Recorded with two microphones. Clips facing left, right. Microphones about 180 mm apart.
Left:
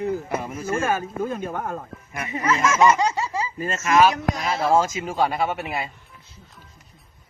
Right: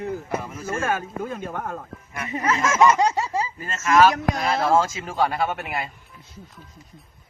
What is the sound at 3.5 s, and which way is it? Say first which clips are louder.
Speech: even; 15° left (ahead or behind).